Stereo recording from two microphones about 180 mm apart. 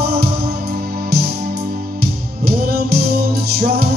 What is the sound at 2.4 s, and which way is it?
Music, 60° right (ahead or behind).